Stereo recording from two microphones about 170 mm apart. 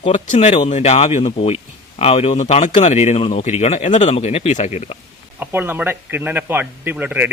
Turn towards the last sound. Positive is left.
turn(degrees=-10)  # may be behind; listen again after turning